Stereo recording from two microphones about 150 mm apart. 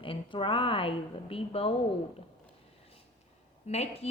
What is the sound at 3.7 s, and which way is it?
Speech, 45° left (ahead or behind).